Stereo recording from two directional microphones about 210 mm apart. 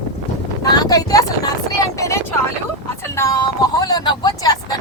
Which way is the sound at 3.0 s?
10° left (ahead or behind).